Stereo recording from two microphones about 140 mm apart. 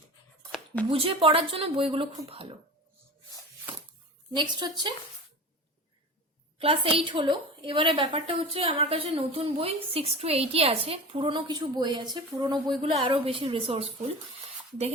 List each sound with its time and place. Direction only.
0.9 s a woman's voice: 40° right (ahead or behind)
4.4 s a woman's voice: 30° right (ahead or behind)
6.6 s a woman's voice: 40° right (ahead or behind)